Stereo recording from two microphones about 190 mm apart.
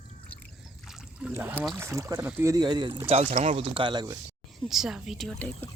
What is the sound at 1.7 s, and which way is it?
Speech, 15° right (ahead or behind).